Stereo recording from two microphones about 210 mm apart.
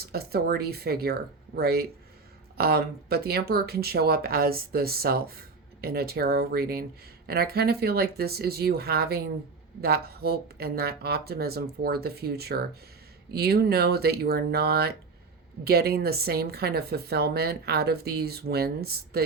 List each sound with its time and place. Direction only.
0.0 s a woman's voice: 50° right (ahead or behind)